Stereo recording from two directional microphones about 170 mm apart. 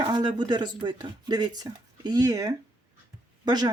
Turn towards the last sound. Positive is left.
turn(degrees=-25)  # may be behind; listen again after turning